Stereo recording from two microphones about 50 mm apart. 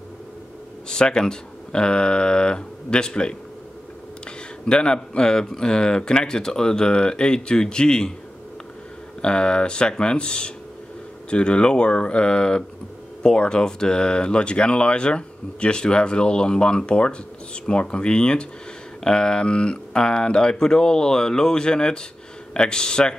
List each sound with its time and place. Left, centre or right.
0.8 s speech: centre
4.6 s speech: centre
9.2 s speech: centre